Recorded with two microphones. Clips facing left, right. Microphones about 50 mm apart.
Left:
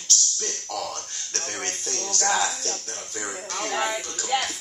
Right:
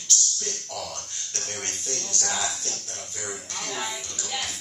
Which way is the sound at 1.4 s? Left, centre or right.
Left.